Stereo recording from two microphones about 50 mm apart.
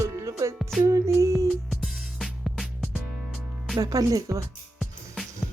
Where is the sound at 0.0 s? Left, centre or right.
Right.